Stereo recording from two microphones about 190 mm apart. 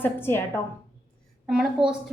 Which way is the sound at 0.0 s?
10° left (ahead or behind).